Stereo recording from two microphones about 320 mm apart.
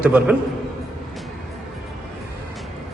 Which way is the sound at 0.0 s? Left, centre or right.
Centre.